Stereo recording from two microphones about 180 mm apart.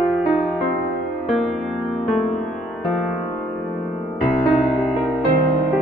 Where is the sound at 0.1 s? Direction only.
5° right (ahead or behind).